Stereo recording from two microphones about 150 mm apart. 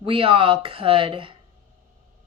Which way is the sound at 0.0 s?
35° right (ahead or behind).